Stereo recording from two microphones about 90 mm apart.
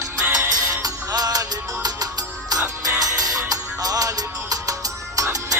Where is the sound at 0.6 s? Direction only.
45° right (ahead or behind).